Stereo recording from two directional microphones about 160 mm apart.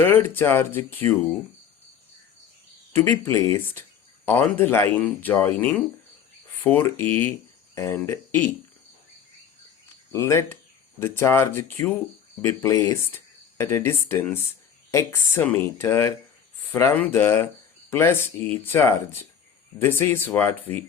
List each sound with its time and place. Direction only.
0.0 s speech: 15° left (ahead or behind)
2.9 s speech: 15° left (ahead or behind)
10.1 s speech: 20° left (ahead or behind)